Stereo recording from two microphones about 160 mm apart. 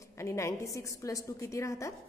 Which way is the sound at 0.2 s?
15° left (ahead or behind).